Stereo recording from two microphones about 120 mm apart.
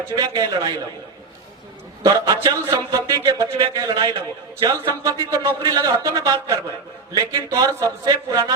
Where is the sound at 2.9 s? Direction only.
30° right (ahead or behind).